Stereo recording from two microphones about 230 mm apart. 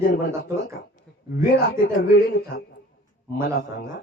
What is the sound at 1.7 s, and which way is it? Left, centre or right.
Speech, left.